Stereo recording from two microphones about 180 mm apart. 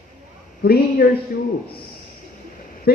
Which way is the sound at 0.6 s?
60° left (ahead or behind).